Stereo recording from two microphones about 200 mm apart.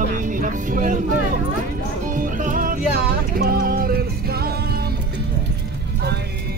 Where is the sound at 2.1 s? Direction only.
40° right (ahead or behind).